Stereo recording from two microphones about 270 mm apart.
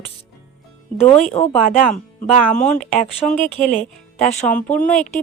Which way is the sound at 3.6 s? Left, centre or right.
Left.